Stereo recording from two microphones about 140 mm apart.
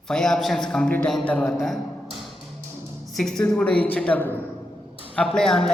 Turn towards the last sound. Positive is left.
turn(degrees=5)  # may be behind; listen again after turning